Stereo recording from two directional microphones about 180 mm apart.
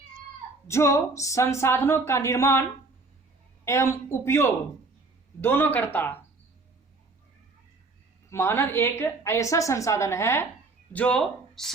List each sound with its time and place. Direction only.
0.7 s a woman's voice: 15° left (ahead or behind)
3.7 s a woman's voice: 15° left (ahead or behind)
8.3 s a woman's voice: 15° left (ahead or behind)